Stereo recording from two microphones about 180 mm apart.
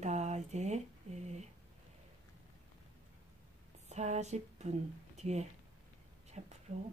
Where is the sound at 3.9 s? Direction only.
40° right (ahead or behind).